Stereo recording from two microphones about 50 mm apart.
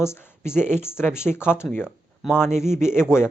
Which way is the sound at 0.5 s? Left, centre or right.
Left.